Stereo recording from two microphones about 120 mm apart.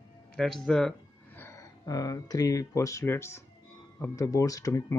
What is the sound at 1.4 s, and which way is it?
Speech, 25° left (ahead or behind).